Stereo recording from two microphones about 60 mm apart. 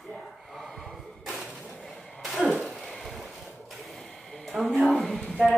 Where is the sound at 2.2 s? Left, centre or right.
Centre.